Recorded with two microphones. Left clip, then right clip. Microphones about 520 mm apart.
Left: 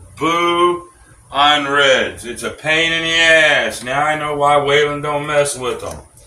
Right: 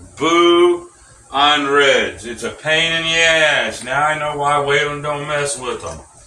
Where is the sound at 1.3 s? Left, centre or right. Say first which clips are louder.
Even; left.